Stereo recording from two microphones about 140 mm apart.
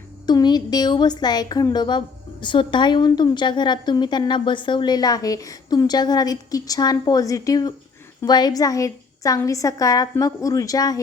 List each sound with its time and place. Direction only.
0.3 s a woman's voice: 30° left (ahead or behind)